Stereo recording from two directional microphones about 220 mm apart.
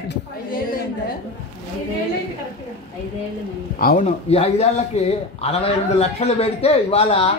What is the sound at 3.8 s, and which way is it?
Speech, 40° left (ahead or behind).